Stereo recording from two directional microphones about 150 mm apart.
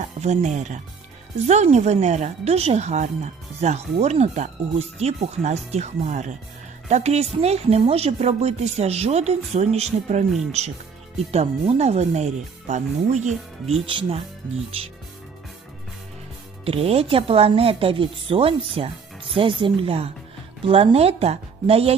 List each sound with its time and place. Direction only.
0.2 s a woman's voice: 50° right (ahead or behind)
13.8 s speech: 35° right (ahead or behind)
16.6 s speech: 40° right (ahead or behind)